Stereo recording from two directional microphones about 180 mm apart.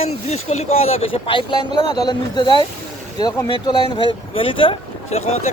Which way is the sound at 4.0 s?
30° left (ahead or behind).